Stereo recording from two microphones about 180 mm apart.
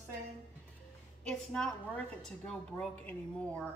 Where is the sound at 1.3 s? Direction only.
5° left (ahead or behind).